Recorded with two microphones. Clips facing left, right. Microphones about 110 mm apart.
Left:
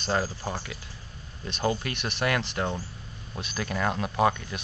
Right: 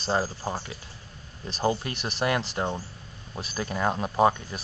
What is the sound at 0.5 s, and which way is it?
Speech, 25° right (ahead or behind).